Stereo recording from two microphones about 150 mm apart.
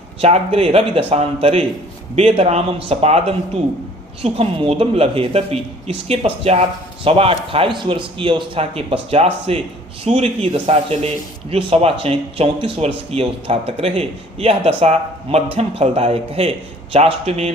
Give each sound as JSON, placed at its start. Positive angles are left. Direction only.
{"t": 0.2, "sound": "speech", "side_deg": -45}